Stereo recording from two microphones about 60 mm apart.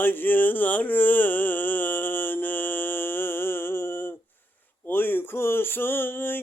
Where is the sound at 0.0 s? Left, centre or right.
Left.